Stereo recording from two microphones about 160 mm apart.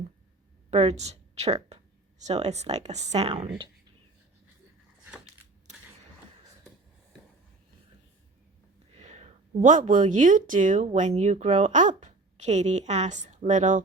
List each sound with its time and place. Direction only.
0.7 s speech: 45° right (ahead or behind)
9.0 s speech: 45° right (ahead or behind)